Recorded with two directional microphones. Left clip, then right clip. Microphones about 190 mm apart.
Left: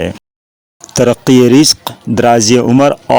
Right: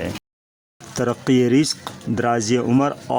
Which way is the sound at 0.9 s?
35° left (ahead or behind).